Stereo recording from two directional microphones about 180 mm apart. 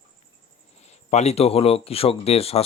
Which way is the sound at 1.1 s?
35° left (ahead or behind).